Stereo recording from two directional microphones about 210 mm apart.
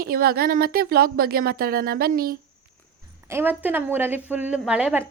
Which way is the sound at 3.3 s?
10° right (ahead or behind).